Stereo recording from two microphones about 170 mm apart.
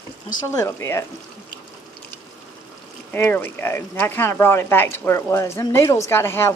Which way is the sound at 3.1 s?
10° left (ahead or behind).